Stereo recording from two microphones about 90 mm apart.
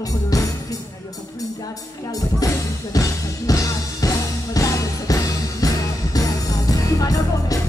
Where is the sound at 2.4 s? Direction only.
40° left (ahead or behind).